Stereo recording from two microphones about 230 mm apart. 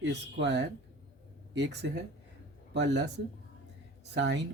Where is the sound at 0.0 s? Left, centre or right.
Right.